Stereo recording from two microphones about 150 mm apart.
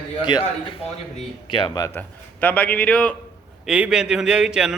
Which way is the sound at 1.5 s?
30° left (ahead or behind).